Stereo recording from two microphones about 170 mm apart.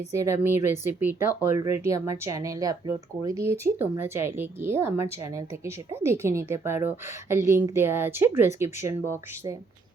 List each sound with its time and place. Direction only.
0.1 s speech: 15° right (ahead or behind)